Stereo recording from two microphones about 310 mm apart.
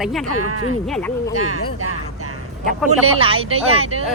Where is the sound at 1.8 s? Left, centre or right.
Right.